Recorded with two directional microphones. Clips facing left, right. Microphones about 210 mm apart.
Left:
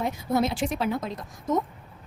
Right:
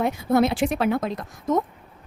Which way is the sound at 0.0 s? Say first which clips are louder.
Right 5 dB; 60° right (ahead or behind).